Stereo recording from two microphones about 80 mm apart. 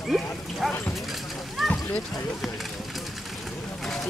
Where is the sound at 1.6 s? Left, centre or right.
Centre.